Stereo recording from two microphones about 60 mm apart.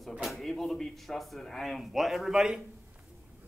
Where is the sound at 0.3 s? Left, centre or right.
Centre.